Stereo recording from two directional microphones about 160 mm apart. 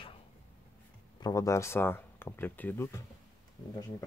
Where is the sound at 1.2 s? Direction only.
20° left (ahead or behind).